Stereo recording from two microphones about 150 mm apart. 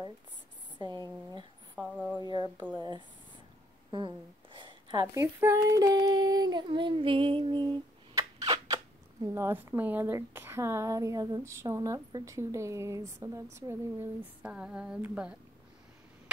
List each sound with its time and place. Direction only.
0.7 s speech: 30° right (ahead or behind)
1.8 s speech: centre (ahead or behind)
2.1 s speech: 30° right (ahead or behind)
3.9 s a sound: 35° right (ahead or behind)
5.0 s speech: 20° right (ahead or behind)